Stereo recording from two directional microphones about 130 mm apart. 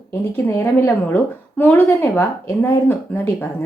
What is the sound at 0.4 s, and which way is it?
A woman's voice, 15° left (ahead or behind).